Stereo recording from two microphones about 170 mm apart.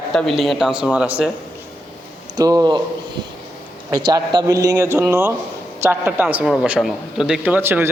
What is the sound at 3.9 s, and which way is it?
A man's voice, 25° right (ahead or behind).